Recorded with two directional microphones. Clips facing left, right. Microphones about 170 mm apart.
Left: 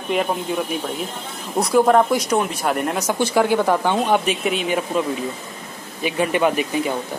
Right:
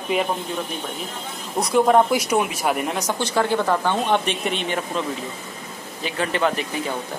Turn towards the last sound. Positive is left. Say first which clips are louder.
# left 4 dB
turn(degrees=15)  # may be behind; listen again after turning